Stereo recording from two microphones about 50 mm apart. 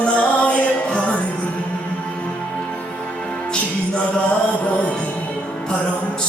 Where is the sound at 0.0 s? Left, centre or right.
Left.